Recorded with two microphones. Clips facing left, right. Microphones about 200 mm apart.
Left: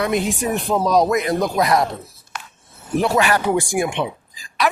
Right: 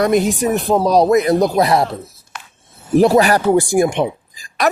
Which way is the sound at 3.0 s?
35° right (ahead or behind).